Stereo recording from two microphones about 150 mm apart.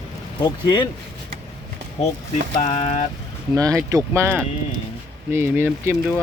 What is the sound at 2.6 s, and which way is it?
Speech, 45° left (ahead or behind).